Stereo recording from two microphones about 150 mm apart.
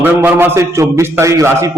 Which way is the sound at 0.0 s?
15° right (ahead or behind).